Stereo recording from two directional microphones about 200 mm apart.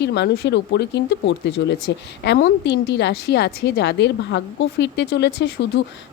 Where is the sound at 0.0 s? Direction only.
60° left (ahead or behind).